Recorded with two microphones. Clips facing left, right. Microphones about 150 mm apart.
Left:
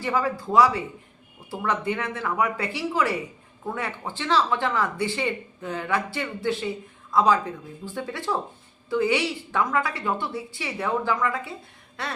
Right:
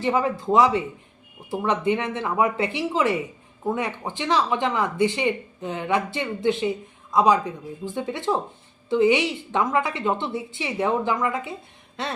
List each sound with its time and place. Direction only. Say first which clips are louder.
0.0 s speech: right 3 dB; 20° right (ahead or behind)